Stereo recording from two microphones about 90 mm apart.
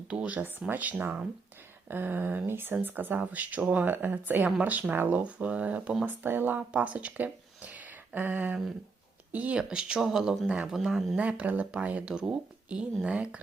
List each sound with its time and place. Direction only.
0.1 s speech: 15° right (ahead or behind)
11.2 s speech: 15° right (ahead or behind)